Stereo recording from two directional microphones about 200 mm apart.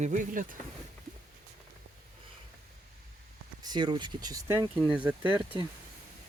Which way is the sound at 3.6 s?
20° right (ahead or behind).